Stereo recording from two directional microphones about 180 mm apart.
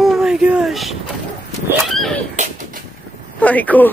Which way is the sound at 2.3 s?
40° right (ahead or behind).